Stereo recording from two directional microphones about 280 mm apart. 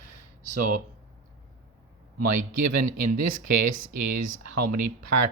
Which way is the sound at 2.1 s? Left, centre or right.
Right.